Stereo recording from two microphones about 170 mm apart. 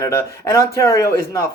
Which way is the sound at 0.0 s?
15° left (ahead or behind).